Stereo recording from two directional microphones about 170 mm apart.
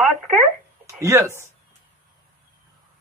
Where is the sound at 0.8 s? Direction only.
15° right (ahead or behind).